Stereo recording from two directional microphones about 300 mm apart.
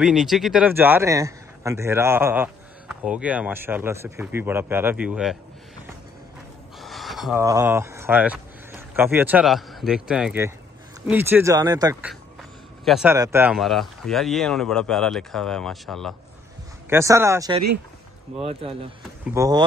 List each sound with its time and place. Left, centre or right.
0.0 s a man's voice: centre
6.8 s a man's voice: centre